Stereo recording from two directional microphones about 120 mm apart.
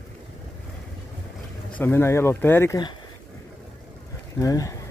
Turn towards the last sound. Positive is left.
turn(degrees=30)  # may be behind; listen again after turning